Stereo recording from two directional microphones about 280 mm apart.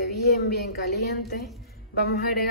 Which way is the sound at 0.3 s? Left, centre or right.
Left.